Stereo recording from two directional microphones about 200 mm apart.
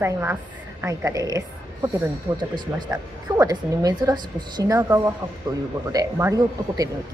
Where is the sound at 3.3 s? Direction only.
15° right (ahead or behind).